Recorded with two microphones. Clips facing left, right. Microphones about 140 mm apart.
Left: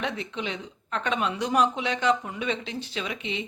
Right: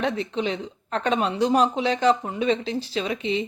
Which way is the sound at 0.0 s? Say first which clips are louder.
Right 6 dB; 35° right (ahead or behind).